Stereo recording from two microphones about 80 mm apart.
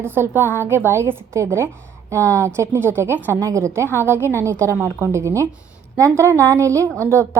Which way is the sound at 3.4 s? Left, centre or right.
Right.